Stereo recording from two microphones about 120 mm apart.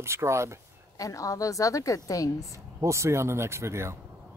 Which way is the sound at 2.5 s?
25° right (ahead or behind).